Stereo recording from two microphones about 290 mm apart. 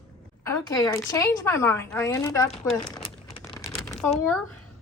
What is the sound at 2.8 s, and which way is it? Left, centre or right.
Typing, centre.